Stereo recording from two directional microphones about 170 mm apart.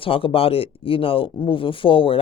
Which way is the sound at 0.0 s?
30° left (ahead or behind).